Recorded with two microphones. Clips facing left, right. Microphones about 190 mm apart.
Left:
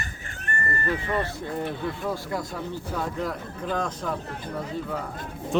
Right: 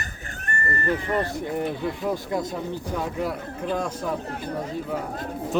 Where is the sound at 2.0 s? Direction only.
20° right (ahead or behind).